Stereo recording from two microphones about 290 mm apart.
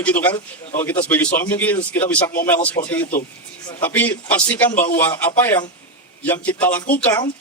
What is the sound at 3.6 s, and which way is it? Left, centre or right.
A man's voice, centre.